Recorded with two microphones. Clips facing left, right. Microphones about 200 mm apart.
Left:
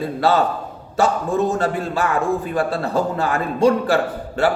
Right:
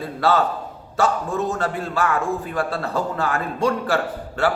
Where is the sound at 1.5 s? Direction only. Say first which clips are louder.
Left 3 dB; 15° left (ahead or behind).